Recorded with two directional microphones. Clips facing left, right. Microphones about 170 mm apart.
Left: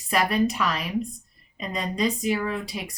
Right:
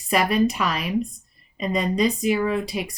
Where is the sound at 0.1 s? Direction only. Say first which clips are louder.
Right 3 dB; 15° right (ahead or behind).